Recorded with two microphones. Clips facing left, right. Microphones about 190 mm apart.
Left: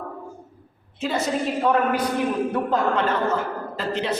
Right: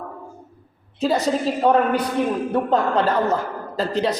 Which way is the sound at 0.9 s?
35° right (ahead or behind).